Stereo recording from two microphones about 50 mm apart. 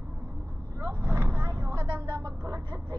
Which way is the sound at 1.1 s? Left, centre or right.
Right.